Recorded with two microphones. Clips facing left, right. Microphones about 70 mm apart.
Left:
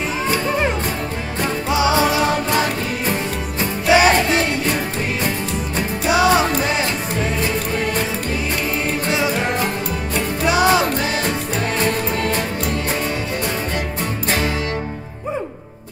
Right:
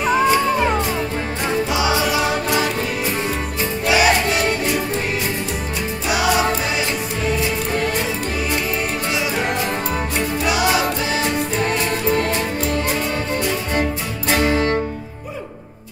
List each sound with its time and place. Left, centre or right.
1.7 s music: left
3.9 s music: left
6.0 s music: left
10.4 s music: left
14.3 s music: right